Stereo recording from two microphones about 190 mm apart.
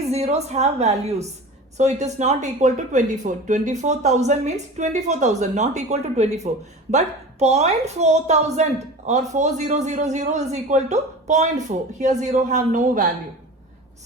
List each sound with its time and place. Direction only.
0.0 s a woman's voice: 35° right (ahead or behind)